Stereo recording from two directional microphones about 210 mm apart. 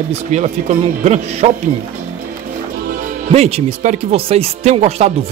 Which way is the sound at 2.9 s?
35° right (ahead or behind).